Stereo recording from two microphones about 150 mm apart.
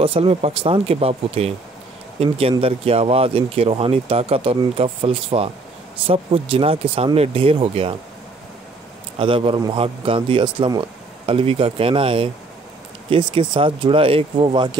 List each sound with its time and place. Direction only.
0.0 s speech: 40° right (ahead or behind)
9.2 s speech: 35° right (ahead or behind)